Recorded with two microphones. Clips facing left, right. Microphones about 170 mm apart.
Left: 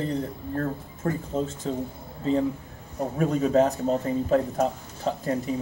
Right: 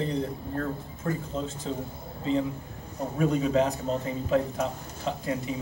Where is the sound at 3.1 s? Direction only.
45° left (ahead or behind).